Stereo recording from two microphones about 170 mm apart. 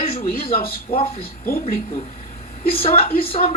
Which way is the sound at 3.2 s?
35° left (ahead or behind).